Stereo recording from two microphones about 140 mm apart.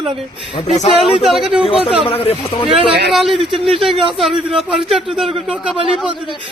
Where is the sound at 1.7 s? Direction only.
45° left (ahead or behind).